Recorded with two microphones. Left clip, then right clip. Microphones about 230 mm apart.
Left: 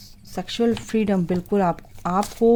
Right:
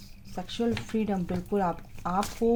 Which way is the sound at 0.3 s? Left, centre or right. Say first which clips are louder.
Left 8 dB; left.